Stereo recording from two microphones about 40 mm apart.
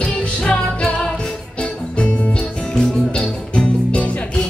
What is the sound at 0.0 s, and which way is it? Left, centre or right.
Music, left.